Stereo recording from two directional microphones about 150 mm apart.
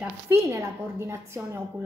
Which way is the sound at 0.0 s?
15° right (ahead or behind).